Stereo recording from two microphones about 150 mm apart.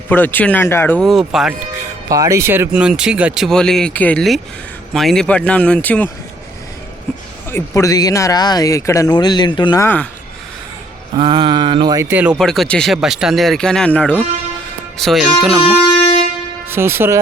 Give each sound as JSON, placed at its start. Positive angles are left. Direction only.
{"t": 0.1, "sound": "speech", "side_deg": 10}
{"t": 0.9, "sound": "speech", "side_deg": 0}
{"t": 2.0, "sound": "speech", "side_deg": -20}
{"t": 7.5, "sound": "speech", "side_deg": 20}
{"t": 9.8, "sound": "speech", "side_deg": 10}
{"t": 11.2, "sound": "speech", "side_deg": -35}
{"t": 12.4, "sound": "speech", "side_deg": 5}
{"t": 16.6, "sound": "speech", "side_deg": -15}